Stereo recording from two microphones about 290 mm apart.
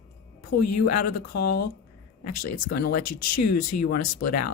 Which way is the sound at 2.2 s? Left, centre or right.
Left.